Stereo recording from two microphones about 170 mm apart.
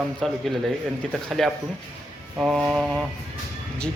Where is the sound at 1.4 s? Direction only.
Centre (ahead or behind).